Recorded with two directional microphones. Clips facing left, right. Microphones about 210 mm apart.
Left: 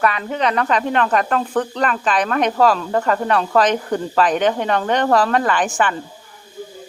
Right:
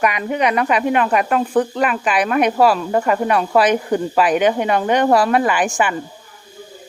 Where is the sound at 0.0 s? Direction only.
15° right (ahead or behind).